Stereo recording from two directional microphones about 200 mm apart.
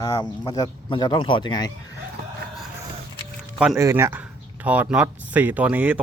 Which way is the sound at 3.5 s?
5° right (ahead or behind).